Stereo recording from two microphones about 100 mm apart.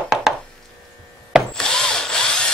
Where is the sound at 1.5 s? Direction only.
5° left (ahead or behind).